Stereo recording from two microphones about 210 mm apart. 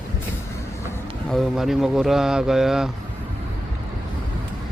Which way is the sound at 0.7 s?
10° left (ahead or behind).